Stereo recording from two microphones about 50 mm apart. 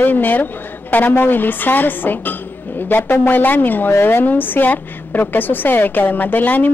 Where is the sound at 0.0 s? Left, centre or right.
Left.